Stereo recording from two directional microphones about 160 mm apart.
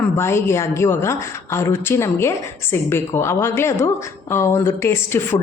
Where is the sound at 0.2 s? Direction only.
15° left (ahead or behind).